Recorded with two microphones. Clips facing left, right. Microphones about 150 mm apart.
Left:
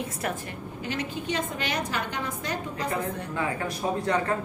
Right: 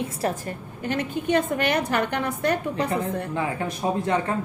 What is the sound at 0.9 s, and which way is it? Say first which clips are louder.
A woman's voice: right 7 dB; 55° right (ahead or behind).